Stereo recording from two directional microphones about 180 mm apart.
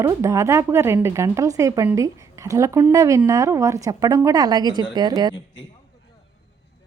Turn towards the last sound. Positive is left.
turn(degrees=-25)  # may be behind; listen again after turning